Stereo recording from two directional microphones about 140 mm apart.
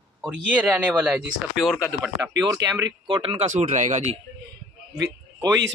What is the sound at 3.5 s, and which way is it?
Speech, 60° right (ahead or behind).